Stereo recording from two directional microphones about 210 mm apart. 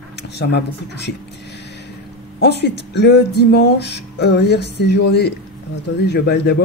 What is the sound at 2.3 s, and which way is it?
Speech, 50° left (ahead or behind).